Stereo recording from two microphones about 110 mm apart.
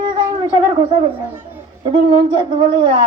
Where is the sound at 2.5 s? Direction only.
45° right (ahead or behind).